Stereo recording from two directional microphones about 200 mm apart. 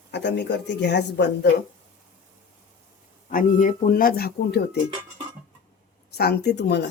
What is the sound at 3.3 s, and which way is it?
Speech, 45° left (ahead or behind).